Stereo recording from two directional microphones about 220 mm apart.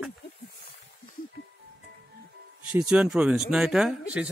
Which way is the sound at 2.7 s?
5° right (ahead or behind).